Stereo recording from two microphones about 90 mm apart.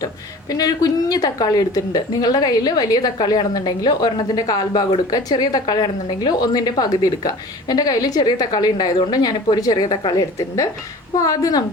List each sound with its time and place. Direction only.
0.5 s a woman's voice: 45° left (ahead or behind)